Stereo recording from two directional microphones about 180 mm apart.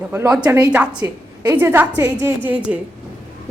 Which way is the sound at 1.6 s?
10° right (ahead or behind).